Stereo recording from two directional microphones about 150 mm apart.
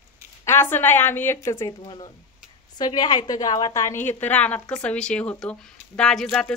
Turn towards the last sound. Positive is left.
turn(degrees=5)  # may be behind; listen again after turning